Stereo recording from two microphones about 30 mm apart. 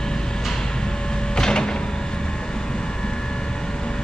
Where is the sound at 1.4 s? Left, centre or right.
Left.